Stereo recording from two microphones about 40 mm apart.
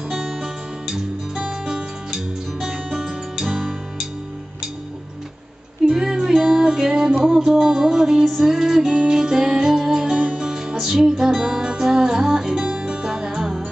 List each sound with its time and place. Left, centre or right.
0.1 s guitar: centre
0.8 s music: centre
5.9 s music: centre
10.1 s music: right
10.5 s music: centre
12.5 s music: right